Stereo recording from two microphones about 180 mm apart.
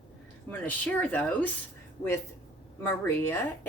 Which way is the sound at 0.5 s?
10° left (ahead or behind).